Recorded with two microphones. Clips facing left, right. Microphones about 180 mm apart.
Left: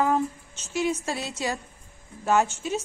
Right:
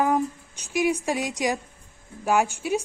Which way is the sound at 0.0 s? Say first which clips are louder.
Right 1 dB; 15° right (ahead or behind).